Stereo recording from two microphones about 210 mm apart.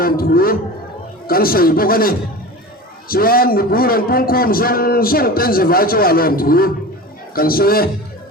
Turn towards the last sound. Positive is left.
turn(degrees=45)  # may be behind; listen again after turning